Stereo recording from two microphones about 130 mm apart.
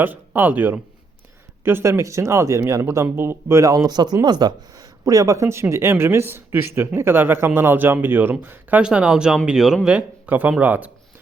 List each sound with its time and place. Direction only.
0.0 s speech: 15° right (ahead or behind)